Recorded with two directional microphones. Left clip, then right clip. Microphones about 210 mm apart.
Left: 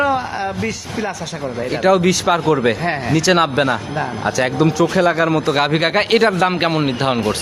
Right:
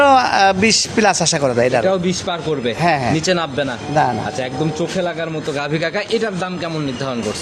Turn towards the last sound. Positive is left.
turn(degrees=25)  # may be behind; listen again after turning